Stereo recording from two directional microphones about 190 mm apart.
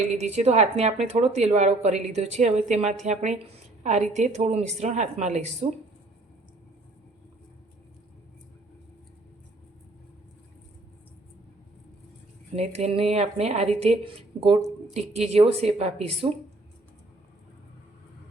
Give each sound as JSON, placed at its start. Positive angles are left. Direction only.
{"t": 0.1, "sound": "speech", "side_deg": -35}
{"t": 12.5, "sound": "speech", "side_deg": -35}